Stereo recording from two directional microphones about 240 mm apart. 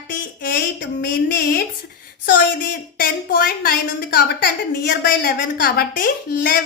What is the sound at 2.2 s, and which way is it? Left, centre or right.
A woman's voice, left.